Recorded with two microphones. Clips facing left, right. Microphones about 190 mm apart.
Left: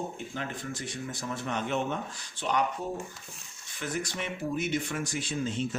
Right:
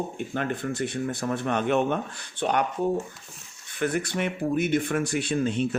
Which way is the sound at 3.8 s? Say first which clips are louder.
Right 8 dB; 60° right (ahead or behind).